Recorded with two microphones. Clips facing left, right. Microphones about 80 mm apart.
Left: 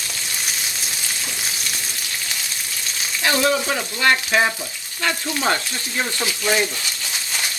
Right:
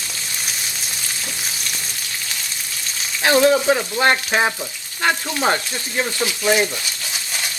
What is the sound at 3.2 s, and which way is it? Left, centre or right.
Speech, right.